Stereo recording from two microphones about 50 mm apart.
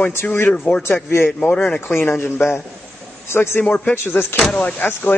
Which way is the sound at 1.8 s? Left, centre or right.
Left.